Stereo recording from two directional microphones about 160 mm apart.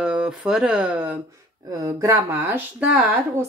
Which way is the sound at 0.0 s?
5° right (ahead or behind).